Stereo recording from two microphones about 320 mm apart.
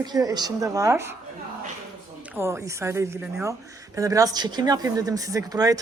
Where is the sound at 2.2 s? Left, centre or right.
Centre.